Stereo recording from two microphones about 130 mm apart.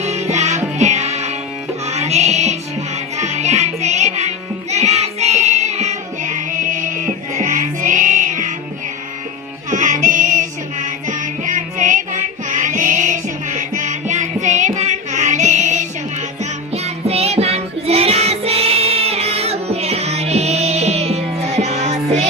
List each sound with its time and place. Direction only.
0.0 s music: 60° right (ahead or behind)
4.7 s child singing: 55° right (ahead or behind); by 8.5 s 75° right (ahead or behind)
9.6 s music: 75° right (ahead or behind)
16.7 s music: 55° right (ahead or behind)